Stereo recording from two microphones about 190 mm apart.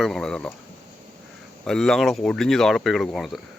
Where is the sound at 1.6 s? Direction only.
Centre (ahead or behind).